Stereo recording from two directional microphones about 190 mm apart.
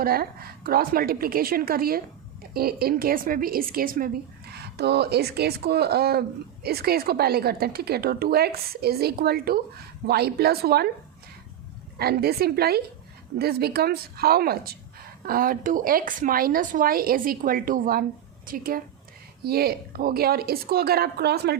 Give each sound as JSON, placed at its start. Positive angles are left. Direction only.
{"t": 0.0, "sound": "a woman's voice", "side_deg": -50}
{"t": 11.9, "sound": "a woman's voice", "side_deg": -55}